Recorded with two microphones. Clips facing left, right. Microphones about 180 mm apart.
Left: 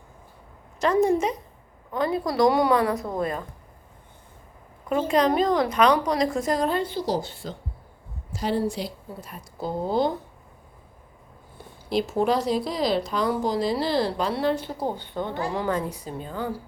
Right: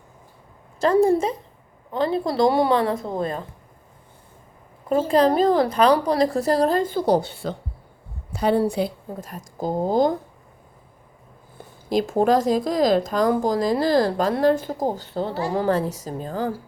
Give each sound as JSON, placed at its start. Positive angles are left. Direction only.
{"t": 0.8, "sound": "a woman's voice", "side_deg": -30}
{"t": 4.9, "sound": "a woman's voice", "side_deg": -30}
{"t": 11.5, "sound": "a woman's voice", "side_deg": -45}